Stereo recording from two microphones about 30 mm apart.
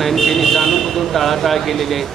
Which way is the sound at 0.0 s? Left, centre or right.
Centre.